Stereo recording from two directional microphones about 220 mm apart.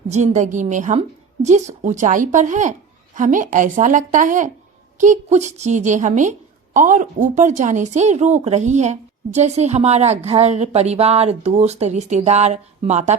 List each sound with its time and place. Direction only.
0.1 s speech: 30° right (ahead or behind)